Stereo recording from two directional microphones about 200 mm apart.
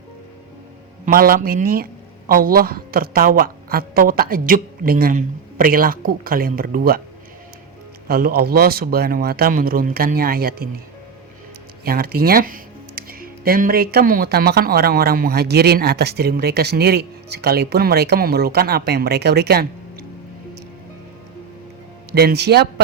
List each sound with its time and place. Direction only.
1.0 s speech: 45° right (ahead or behind)
8.0 s speech: 50° right (ahead or behind)
11.9 s speech: 50° right (ahead or behind)
22.1 s speech: 55° right (ahead or behind)